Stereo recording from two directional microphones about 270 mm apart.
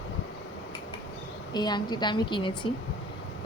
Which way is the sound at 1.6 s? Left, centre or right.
Centre.